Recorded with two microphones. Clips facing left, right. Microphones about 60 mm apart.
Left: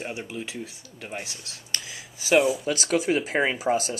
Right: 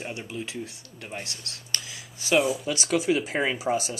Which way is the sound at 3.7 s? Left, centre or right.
Left.